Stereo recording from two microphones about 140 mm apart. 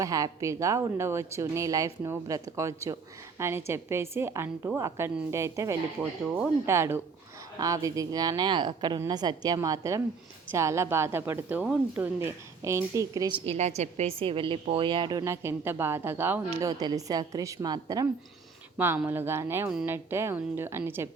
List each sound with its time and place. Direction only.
0.0 s speech: 25° right (ahead or behind)
13.5 s a woman's voice: 55° right (ahead or behind); by 15.2 s 35° right (ahead or behind)
15.2 s speech: 20° right (ahead or behind)
16.6 s speech: 25° right (ahead or behind)
19.0 s speech: 15° right (ahead or behind)